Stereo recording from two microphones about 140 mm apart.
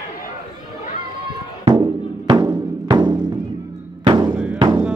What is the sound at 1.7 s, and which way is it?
Music, 30° right (ahead or behind).